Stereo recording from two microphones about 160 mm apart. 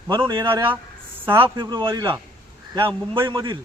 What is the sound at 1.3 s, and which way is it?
Speech, 15° right (ahead or behind).